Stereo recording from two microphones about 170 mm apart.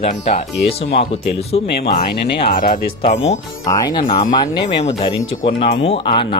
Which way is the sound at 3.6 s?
20° left (ahead or behind).